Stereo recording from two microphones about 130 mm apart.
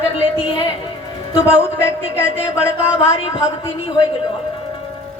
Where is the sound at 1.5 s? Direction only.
20° left (ahead or behind).